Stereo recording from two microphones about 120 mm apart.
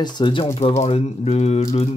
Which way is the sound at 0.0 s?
40° left (ahead or behind).